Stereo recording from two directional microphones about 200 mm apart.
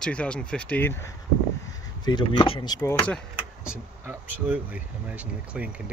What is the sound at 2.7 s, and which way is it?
Speech, 5° left (ahead or behind).